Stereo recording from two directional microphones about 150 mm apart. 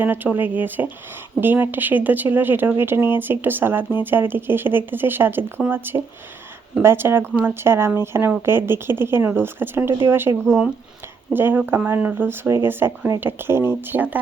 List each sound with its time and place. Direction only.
0.0 s speech: 10° right (ahead or behind)
10.4 s speech: centre (ahead or behind)
11.3 s speech: 15° right (ahead or behind)